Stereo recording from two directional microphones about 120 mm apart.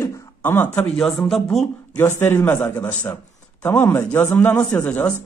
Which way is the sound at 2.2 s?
15° left (ahead or behind).